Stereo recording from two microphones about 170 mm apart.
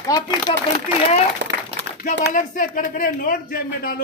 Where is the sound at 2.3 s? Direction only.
50° left (ahead or behind).